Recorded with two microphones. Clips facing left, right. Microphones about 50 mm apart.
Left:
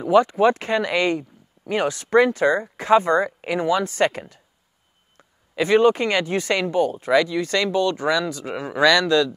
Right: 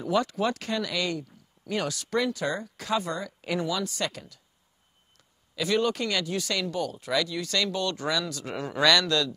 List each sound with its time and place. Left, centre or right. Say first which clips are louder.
0.0 s speech: left 10 dB; left